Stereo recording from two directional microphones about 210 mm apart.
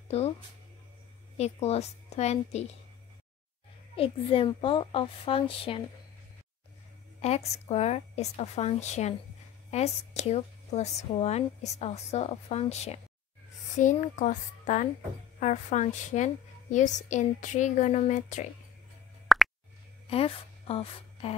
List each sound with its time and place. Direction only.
1.4 s a woman's voice: 30° left (ahead or behind)
3.9 s a child's voice: 25° left (ahead or behind)
7.2 s a woman's voice: 30° left (ahead or behind)
19.2 s plop: centre (ahead or behind)
20.1 s a woman's voice: 30° left (ahead or behind)